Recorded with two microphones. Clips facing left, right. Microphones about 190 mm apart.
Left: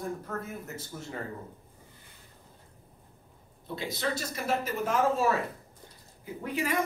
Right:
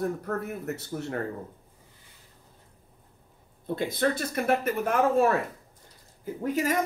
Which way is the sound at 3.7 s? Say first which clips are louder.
Right 6 dB; 50° right (ahead or behind).